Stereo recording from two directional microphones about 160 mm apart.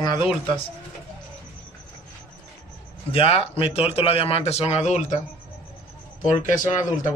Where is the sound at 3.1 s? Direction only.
35° left (ahead or behind).